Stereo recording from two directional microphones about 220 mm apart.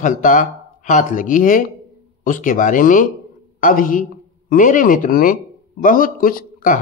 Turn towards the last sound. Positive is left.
turn(degrees=40)  # may be behind; listen again after turning